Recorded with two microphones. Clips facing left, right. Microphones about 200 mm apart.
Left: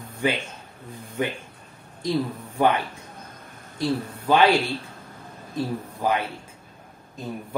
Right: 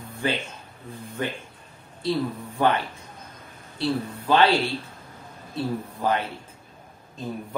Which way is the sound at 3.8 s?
15° left (ahead or behind).